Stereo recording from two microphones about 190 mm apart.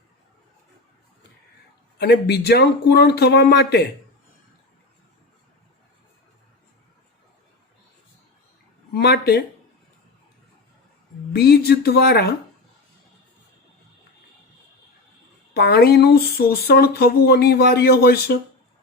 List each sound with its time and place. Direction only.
2.0 s speech: 60° left (ahead or behind)
8.9 s a sound: 60° left (ahead or behind)
11.3 s speech: 55° left (ahead or behind)
15.5 s speech: 55° left (ahead or behind)